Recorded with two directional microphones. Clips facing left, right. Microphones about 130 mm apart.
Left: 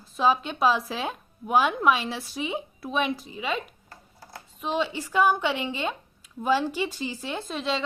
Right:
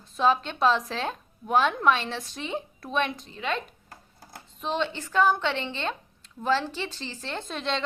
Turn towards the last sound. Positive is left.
turn(degrees=5)  # may be behind; listen again after turning